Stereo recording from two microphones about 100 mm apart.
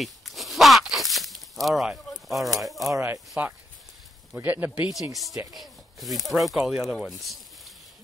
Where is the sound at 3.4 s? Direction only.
15° right (ahead or behind).